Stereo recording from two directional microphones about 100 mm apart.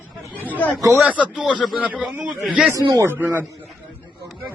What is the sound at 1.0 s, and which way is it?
Speech, 15° right (ahead or behind).